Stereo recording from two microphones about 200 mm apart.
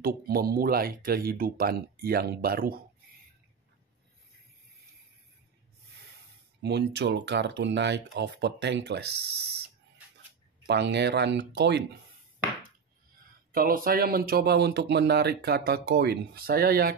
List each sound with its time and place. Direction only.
0.0 s speech: 50° right (ahead or behind)
6.6 s speech: 55° right (ahead or behind)
10.7 s speech: 60° right (ahead or behind)
13.5 s speech: 45° right (ahead or behind)